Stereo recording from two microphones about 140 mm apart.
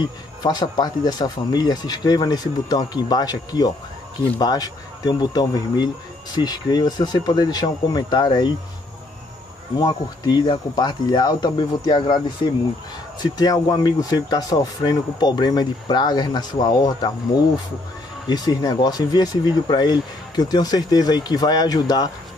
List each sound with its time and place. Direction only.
0.4 s speech: 30° left (ahead or behind)
9.8 s speech: 30° left (ahead or behind)
18.3 s speech: 30° left (ahead or behind)